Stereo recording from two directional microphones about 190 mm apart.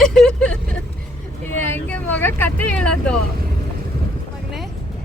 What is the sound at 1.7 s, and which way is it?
Speech, 10° left (ahead or behind).